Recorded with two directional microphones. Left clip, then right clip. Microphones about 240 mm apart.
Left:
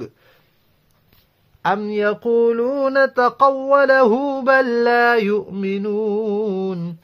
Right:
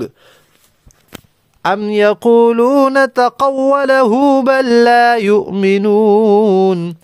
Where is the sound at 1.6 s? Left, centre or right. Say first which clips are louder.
Right 7 dB; right.